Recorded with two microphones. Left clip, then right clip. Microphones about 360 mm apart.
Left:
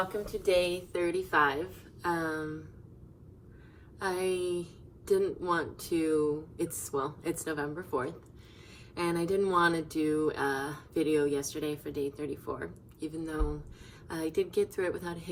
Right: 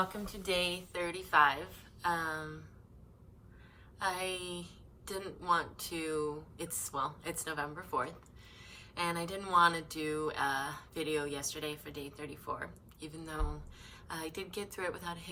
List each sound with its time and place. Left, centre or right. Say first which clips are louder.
0.3 s a woman's voice: left 6 dB; centre
4.0 s a woman's voice: left 5 dB; centre